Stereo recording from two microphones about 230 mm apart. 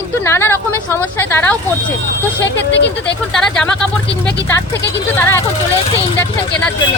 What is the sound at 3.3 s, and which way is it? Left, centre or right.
Speech, centre.